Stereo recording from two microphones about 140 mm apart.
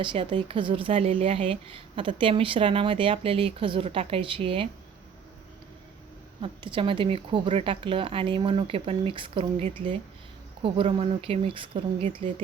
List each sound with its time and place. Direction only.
0.0 s speech: 35° right (ahead or behind)
6.4 s speech: 35° right (ahead or behind)